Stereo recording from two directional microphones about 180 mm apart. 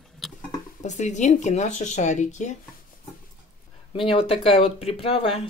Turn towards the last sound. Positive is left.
turn(degrees=30)  # may be behind; listen again after turning